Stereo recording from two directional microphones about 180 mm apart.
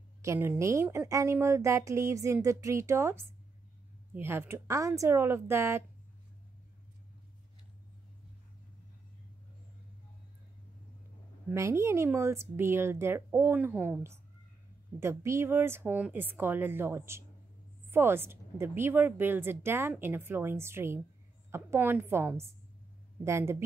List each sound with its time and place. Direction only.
0.2 s a woman's voice: 15° right (ahead or behind)
11.5 s a woman's voice: 15° right (ahead or behind)